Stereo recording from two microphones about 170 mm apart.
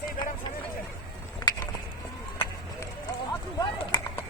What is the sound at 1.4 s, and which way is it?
Insect, 25° left (ahead or behind).